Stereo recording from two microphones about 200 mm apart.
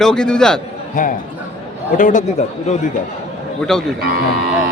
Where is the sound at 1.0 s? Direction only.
40° left (ahead or behind).